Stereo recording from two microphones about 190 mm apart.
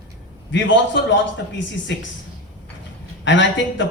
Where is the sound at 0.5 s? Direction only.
75° left (ahead or behind).